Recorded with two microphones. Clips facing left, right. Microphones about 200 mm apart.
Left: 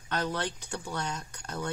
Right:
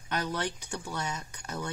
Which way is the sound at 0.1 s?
10° right (ahead or behind).